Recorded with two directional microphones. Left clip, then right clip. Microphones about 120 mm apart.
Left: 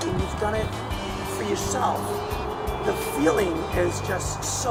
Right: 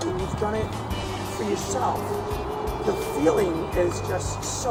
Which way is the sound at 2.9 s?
Centre (ahead or behind).